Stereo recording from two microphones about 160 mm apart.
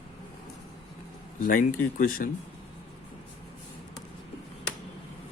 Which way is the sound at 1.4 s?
60° left (ahead or behind).